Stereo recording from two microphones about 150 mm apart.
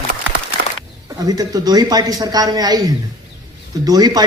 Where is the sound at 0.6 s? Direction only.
90° right.